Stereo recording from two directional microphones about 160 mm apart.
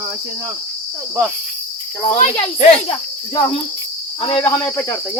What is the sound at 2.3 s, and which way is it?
Speech, 30° left (ahead or behind).